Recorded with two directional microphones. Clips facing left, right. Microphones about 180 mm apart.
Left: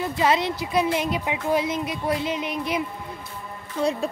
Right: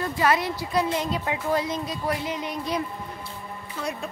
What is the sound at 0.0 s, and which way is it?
Speech, 20° left (ahead or behind).